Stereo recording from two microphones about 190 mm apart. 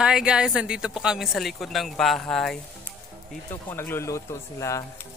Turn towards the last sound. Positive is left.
turn(degrees=15)  # may be behind; listen again after turning